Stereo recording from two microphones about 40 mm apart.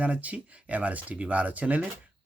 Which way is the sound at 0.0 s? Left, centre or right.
Right.